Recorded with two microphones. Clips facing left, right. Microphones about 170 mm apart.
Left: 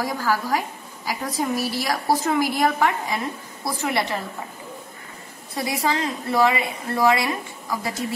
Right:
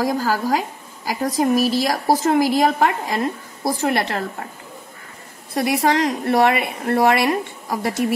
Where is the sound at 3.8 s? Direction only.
75° right (ahead or behind).